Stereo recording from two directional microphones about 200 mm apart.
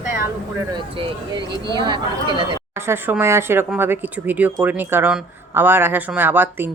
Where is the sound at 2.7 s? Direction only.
10° right (ahead or behind).